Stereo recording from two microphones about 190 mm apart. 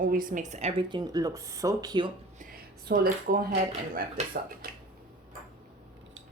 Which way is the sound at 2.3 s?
50° right (ahead or behind).